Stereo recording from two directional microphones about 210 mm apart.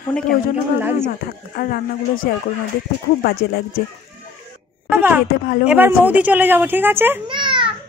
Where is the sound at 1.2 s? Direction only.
45° left (ahead or behind).